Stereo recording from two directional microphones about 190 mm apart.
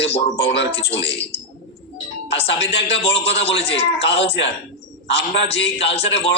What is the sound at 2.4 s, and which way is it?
A man's voice, 65° left (ahead or behind).